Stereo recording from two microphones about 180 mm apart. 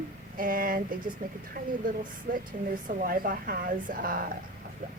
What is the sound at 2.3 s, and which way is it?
Speech, 50° right (ahead or behind).